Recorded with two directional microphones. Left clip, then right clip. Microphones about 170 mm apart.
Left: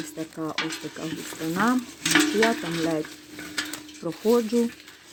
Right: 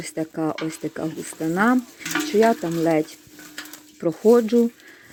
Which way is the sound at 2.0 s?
40° left (ahead or behind).